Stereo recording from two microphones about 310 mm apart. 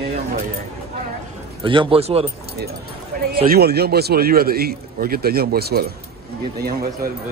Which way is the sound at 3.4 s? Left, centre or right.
Right.